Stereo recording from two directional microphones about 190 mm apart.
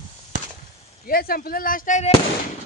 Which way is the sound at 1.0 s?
50° left (ahead or behind).